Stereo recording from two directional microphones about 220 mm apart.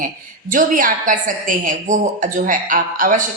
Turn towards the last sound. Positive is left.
turn(degrees=-35)  # may be behind; listen again after turning